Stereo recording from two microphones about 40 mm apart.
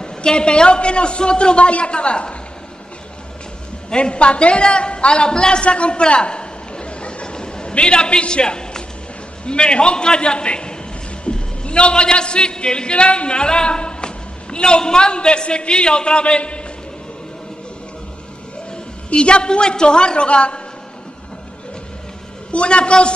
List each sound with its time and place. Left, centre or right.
0.0 s a man's voice: left
3.9 s a woman's voice: left
19.0 s a man's voice: left
22.5 s a man's voice: left